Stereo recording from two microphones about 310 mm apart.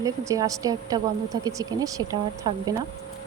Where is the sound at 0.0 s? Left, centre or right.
Centre.